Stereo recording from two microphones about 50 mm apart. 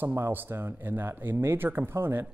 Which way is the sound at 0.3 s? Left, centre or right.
Right.